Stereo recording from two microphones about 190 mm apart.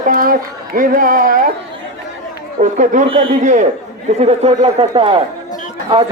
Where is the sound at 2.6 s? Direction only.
40° right (ahead or behind).